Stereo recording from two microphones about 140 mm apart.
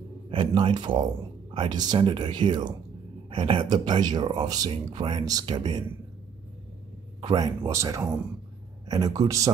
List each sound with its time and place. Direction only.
0.3 s speech: 35° right (ahead or behind)
7.2 s speech: 30° right (ahead or behind)